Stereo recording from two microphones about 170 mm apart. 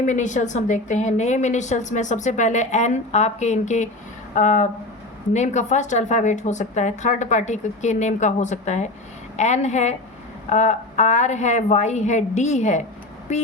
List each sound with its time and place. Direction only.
0.0 s a woman's voice: 45° left (ahead or behind)